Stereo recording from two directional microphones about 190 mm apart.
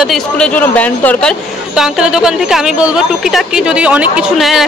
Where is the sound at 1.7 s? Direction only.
5° right (ahead or behind).